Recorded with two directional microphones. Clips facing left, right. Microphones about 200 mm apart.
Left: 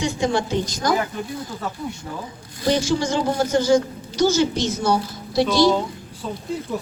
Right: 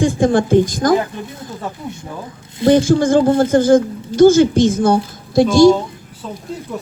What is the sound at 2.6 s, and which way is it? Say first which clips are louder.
A woman's voice: right 9 dB; 50° right (ahead or behind).